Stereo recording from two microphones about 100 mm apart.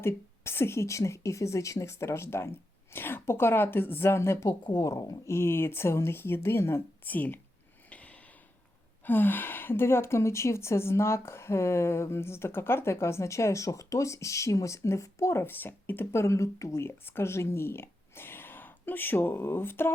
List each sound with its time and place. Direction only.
0.0 s a woman's voice: 25° left (ahead or behind)
7.9 s a sound: 15° left (ahead or behind)
9.0 s a woman's voice: 20° left (ahead or behind)